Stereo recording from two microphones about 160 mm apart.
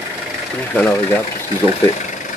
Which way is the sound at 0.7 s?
5° left (ahead or behind).